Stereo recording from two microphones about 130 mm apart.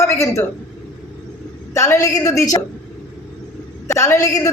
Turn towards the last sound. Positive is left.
turn(degrees=25)  # may be behind; listen again after turning